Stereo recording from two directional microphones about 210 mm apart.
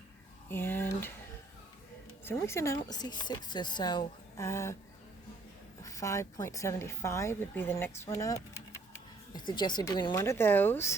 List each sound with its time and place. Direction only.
0.5 s a sound: 10° left (ahead or behind)
2.2 s speech: 10° left (ahead or behind)
5.8 s a woman's voice: 15° left (ahead or behind)